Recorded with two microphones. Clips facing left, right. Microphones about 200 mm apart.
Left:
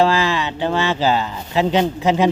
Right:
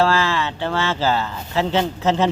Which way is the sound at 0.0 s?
15° left (ahead or behind).